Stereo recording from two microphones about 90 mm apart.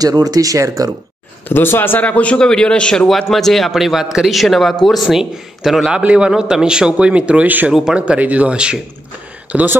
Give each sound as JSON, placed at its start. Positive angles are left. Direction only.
{"t": 0.0, "sound": "speech", "side_deg": -45}
{"t": 1.5, "sound": "a man's voice", "side_deg": 25}